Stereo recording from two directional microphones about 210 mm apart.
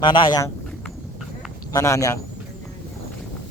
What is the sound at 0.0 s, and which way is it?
Speech, 25° left (ahead or behind).